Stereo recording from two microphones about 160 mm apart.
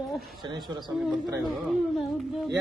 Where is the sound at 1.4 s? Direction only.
Centre (ahead or behind).